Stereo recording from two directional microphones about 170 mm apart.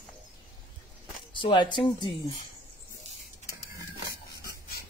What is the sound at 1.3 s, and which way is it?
Speech, 30° left (ahead or behind).